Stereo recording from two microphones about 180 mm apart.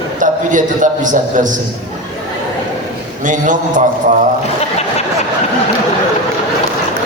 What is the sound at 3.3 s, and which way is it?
Speech, 45° right (ahead or behind).